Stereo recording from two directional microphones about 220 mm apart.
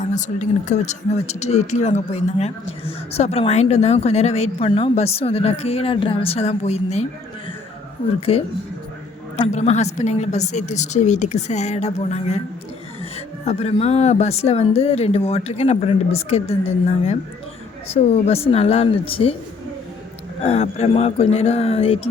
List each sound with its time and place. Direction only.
0.0 s speech: 35° left (ahead or behind)
8.2 s speech: 25° left (ahead or behind)
20.4 s speech: 25° left (ahead or behind)